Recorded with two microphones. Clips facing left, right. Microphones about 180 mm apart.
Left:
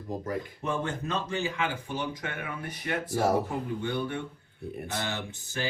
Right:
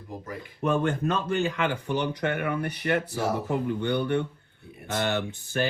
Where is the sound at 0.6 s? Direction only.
60° right (ahead or behind).